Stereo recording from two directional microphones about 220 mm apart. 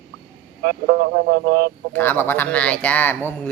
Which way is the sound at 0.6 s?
45° right (ahead or behind).